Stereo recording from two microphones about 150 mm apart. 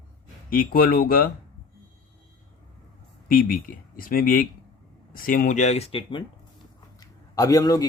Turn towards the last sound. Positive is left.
turn(degrees=25)  # may be behind; listen again after turning